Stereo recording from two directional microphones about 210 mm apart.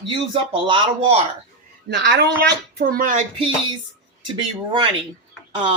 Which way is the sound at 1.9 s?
55° right (ahead or behind).